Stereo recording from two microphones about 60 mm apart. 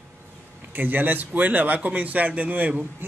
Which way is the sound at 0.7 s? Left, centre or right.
Right.